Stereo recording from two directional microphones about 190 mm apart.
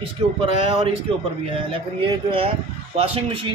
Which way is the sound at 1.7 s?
30° right (ahead or behind).